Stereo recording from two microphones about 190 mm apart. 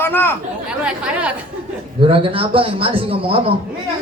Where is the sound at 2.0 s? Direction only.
30° right (ahead or behind).